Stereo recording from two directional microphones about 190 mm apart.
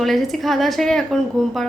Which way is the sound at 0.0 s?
Centre (ahead or behind).